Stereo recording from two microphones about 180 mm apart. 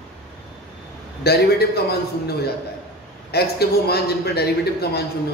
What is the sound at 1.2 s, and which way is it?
Speech, 60° left (ahead or behind).